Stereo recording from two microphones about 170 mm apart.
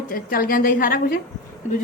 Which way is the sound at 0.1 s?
60° left (ahead or behind).